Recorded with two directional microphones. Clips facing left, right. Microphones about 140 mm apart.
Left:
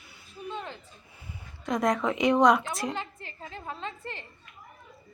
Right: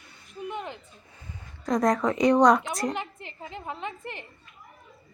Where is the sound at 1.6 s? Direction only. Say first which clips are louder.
Right 3 dB; centre (ahead or behind).